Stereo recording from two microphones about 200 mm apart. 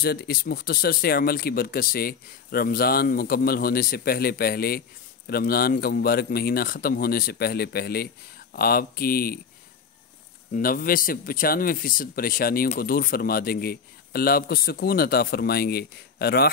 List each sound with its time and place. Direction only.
0.0 s speech: 50° left (ahead or behind)
10.5 s speech: 45° left (ahead or behind)